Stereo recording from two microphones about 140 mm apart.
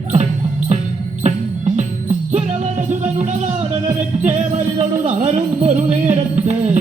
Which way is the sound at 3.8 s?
60° right (ahead or behind).